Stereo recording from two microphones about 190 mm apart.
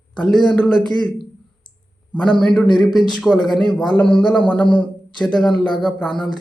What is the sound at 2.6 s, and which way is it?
Speech, 25° left (ahead or behind).